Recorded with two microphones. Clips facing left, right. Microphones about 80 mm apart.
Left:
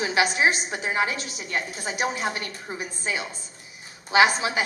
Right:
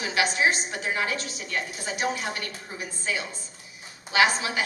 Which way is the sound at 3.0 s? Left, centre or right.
Left.